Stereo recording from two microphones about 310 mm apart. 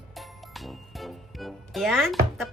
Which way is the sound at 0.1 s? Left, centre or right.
Centre.